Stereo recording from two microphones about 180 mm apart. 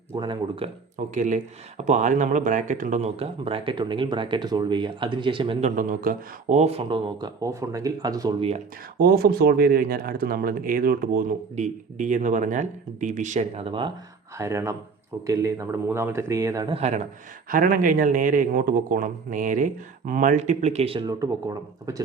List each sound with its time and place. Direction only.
0.2 s speech: 25° right (ahead or behind)
0.9 s speech: 45° right (ahead or behind); by 8.4 s 20° right (ahead or behind)
9.0 s speech: 60° right (ahead or behind); by 13.9 s 30° right (ahead or behind)
14.3 s speech: 15° right (ahead or behind)
16.6 s speech: 35° right (ahead or behind)
17.5 s speech: 50° right (ahead or behind)
21.1 s speech: 20° right (ahead or behind)